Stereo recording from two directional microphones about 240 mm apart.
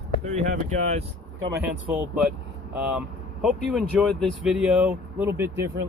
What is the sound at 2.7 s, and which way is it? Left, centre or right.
Speech, centre.